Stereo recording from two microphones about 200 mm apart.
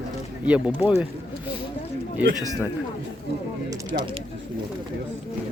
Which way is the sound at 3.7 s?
25° right (ahead or behind).